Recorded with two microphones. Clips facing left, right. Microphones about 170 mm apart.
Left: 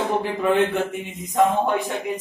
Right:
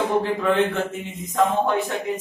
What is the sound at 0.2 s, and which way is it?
A man's voice, 15° left (ahead or behind).